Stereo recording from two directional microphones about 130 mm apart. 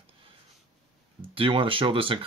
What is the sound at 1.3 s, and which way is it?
Speech, 45° right (ahead or behind).